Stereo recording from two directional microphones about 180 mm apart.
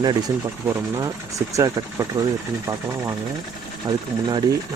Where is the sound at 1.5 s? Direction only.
20° right (ahead or behind).